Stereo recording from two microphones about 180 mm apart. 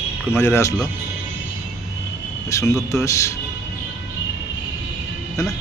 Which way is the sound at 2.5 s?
15° left (ahead or behind).